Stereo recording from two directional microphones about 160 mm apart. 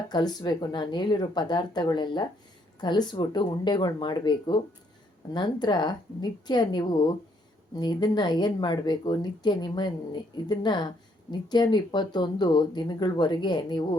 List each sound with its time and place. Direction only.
0.1 s speech: 25° left (ahead or behind)